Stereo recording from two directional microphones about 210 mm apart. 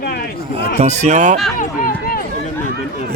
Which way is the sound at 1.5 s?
40° left (ahead or behind).